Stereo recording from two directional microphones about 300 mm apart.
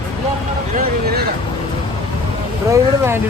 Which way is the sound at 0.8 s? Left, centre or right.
Right.